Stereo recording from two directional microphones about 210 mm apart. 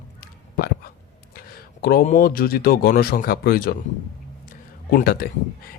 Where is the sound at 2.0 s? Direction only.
40° left (ahead or behind).